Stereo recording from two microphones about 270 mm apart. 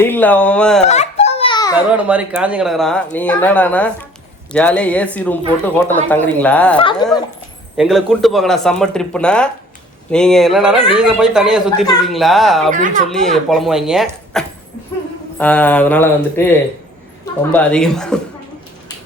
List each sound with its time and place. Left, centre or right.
0.0 s speech: centre
0.9 s baby laughter: left
1.9 s speech: centre
6.7 s speech: centre
7.8 s speech: centre
12.7 s speech: right
13.1 s speech: centre